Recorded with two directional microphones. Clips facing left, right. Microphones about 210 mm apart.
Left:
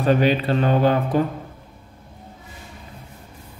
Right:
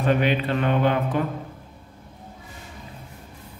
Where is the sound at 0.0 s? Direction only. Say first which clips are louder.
Left 3 dB; 35° left (ahead or behind).